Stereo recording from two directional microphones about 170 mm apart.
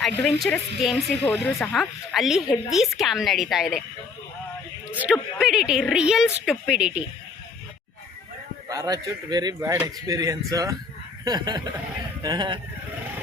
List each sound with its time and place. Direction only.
0.0 s speech: centre (ahead or behind)
4.9 s speech: 5° right (ahead or behind)
8.7 s speech: 20° right (ahead or behind)